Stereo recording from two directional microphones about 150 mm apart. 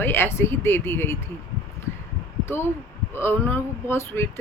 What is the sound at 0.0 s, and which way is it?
Speech, 15° left (ahead or behind).